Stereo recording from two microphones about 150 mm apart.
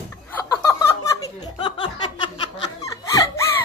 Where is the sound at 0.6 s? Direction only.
20° left (ahead or behind).